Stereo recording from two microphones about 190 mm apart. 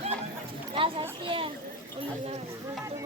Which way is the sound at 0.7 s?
30° right (ahead or behind).